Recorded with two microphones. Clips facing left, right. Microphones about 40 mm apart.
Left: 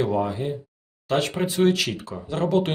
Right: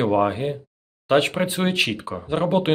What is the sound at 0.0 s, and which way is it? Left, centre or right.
Speech, right.